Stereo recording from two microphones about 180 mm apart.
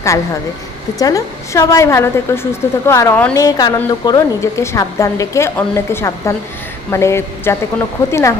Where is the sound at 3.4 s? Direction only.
20° left (ahead or behind).